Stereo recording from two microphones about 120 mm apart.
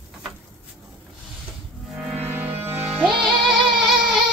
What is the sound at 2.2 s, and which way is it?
Music, 20° right (ahead or behind).